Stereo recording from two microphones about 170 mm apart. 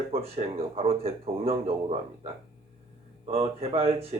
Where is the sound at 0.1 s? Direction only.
35° right (ahead or behind).